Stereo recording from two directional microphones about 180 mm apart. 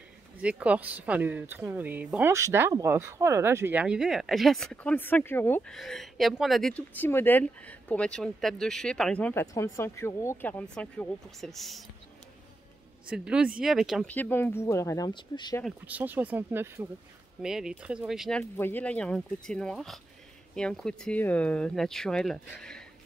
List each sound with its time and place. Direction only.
0.4 s speech: 5° right (ahead or behind); by 5.8 s 10° left (ahead or behind)
5.8 s speech: centre (ahead or behind)
13.1 s speech: 5° right (ahead or behind)
14.1 s speech: 10° left (ahead or behind)
15.6 s speech: 10° right (ahead or behind)
18.4 s speech: 10° left (ahead or behind)